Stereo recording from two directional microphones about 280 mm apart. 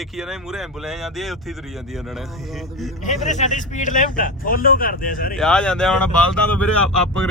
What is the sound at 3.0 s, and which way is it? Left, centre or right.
Speech, left.